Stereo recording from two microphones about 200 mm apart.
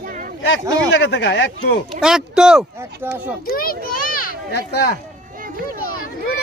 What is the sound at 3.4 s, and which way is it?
Speech, 45° left (ahead or behind).